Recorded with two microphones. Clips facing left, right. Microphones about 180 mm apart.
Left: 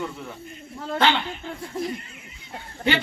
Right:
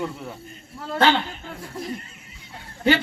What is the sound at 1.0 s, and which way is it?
Speech, 40° right (ahead or behind).